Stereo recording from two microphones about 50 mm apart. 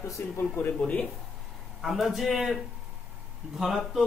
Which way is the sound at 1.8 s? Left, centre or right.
Centre.